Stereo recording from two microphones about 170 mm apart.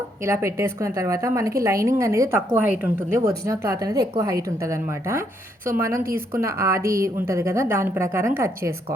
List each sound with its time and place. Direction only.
0.3 s a woman's voice: 15° right (ahead or behind)
6.0 s speech: 60° right (ahead or behind)
6.4 s a woman's voice: 15° right (ahead or behind)